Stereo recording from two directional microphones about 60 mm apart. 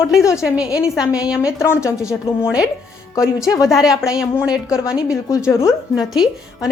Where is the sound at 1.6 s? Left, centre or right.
Left.